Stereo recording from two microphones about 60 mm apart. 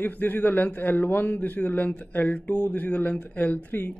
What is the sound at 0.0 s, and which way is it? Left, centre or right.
Speech, left.